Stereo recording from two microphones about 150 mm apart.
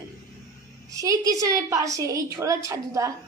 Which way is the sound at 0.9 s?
20° right (ahead or behind).